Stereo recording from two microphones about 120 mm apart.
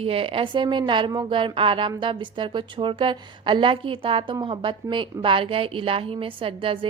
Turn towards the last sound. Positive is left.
turn(degrees=-45)  # may be behind; listen again after turning